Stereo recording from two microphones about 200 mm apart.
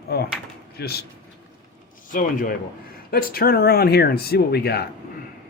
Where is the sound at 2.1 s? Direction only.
45° left (ahead or behind).